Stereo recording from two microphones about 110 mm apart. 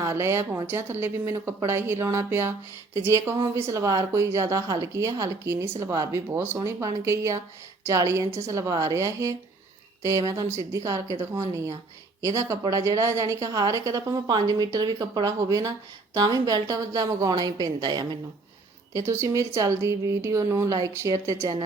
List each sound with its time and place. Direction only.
0.0 s a woman's voice: 25° right (ahead or behind); by 18.2 s 40° right (ahead or behind)
18.9 s a woman's voice: 25° right (ahead or behind)